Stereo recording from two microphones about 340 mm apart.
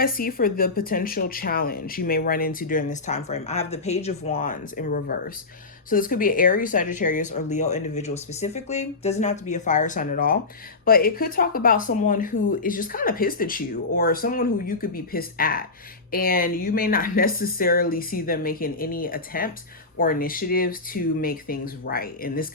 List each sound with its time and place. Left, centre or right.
0.0 s speech: left